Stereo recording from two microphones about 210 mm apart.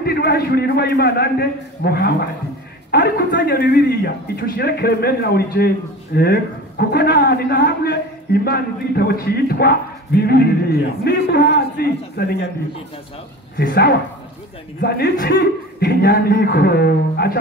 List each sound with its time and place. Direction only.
0.0 s a man's voice: 50° left (ahead or behind)
13.6 s a man's voice: 50° left (ahead or behind)